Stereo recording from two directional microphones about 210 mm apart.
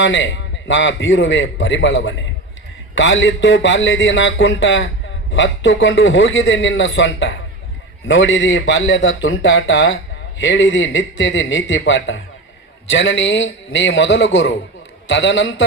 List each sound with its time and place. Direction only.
0.0 s a man's voice: 60° left (ahead or behind)